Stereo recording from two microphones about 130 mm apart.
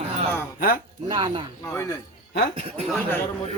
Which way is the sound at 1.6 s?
20° left (ahead or behind).